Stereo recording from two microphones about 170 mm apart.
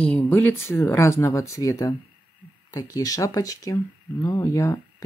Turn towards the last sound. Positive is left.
turn(degrees=20)  # may be behind; listen again after turning